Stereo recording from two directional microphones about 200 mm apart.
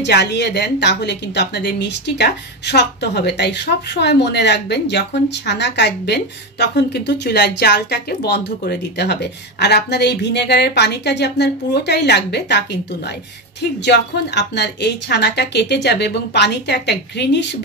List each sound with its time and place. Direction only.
0.0 s a woman's voice: 55° left (ahead or behind)